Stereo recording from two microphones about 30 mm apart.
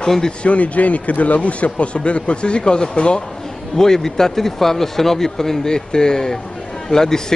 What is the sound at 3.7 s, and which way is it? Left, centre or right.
Speech, centre.